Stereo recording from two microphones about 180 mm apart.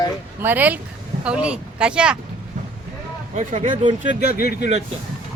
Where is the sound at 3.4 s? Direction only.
40° right (ahead or behind).